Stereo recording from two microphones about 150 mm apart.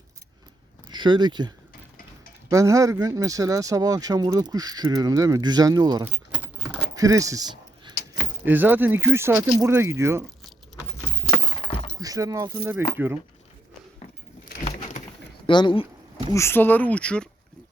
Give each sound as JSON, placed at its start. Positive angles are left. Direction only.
{"t": 0.9, "sound": "speech", "side_deg": -30}
{"t": 8.4, "sound": "speech", "side_deg": -10}
{"t": 11.5, "sound": "breaking", "side_deg": 35}
{"t": 11.9, "sound": "a sound", "side_deg": -25}
{"t": 13.0, "sound": "speech", "side_deg": -10}
{"t": 15.4, "sound": "speech", "side_deg": 35}
{"t": 16.3, "sound": "speech", "side_deg": 15}